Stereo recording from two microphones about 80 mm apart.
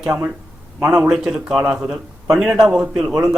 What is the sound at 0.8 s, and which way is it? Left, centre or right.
Speech, right.